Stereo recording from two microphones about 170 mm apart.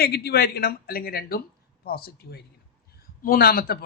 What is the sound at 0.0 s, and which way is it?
A woman's voice, 65° left (ahead or behind).